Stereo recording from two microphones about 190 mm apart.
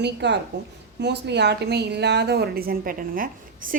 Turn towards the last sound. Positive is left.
turn(degrees=-45)  # may be behind; listen again after turning